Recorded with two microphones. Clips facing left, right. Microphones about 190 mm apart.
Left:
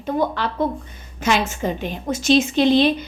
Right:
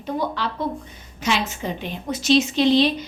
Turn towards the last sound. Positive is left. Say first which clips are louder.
# left 2 dB
turn(degrees=55)  # may be behind; listen again after turning